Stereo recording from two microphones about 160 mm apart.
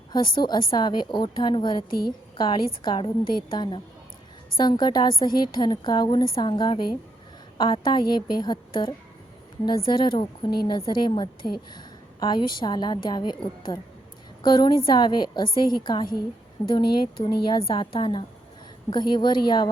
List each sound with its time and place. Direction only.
0.1 s a woman's voice: 30° left (ahead or behind)